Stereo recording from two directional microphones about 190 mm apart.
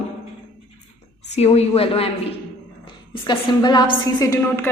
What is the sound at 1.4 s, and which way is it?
A woman's voice, 35° left (ahead or behind).